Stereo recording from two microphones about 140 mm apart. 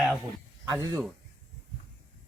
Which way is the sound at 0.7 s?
25° right (ahead or behind).